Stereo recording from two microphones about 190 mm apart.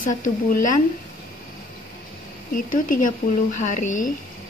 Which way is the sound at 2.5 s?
45° left (ahead or behind).